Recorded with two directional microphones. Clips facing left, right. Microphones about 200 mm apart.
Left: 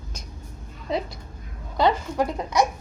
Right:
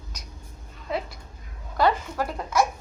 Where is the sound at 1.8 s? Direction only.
20° left (ahead or behind).